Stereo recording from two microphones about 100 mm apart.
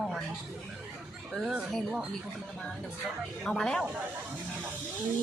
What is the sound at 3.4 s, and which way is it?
Speech, 5° left (ahead or behind).